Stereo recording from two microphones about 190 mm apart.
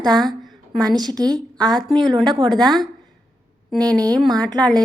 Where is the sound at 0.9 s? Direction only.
20° right (ahead or behind).